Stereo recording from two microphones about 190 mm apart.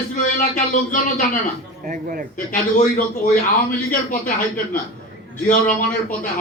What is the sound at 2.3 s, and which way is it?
Speech, 45° left (ahead or behind).